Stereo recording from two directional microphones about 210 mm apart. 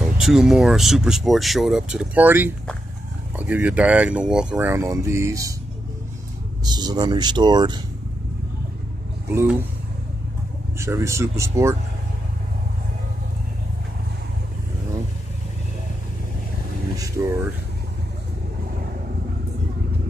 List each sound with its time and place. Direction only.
0.2 s speech: centre (ahead or behind)
6.6 s speech: 20° right (ahead or behind)
9.3 s speech: 10° right (ahead or behind)
10.8 s speech: 15° right (ahead or behind)
16.9 s vehicle: 15° right (ahead or behind)